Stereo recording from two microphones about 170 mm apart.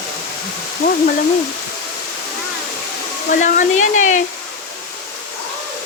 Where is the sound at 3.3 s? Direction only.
50° left (ahead or behind).